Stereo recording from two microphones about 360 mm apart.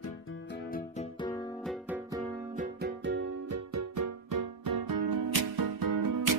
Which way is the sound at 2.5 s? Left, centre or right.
Right.